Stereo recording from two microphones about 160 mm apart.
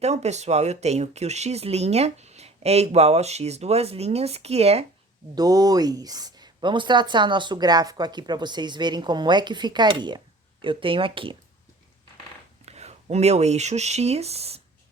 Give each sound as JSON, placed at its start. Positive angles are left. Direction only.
{"t": 0.0, "sound": "speech", "side_deg": -45}
{"t": 5.3, "sound": "speech", "side_deg": -25}
{"t": 12.6, "sound": "speech", "side_deg": -40}